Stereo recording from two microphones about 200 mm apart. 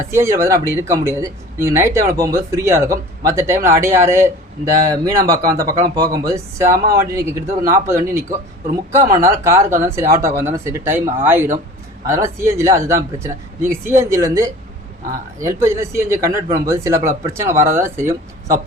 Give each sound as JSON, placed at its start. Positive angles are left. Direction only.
{"t": 0.0, "sound": "speech", "side_deg": -15}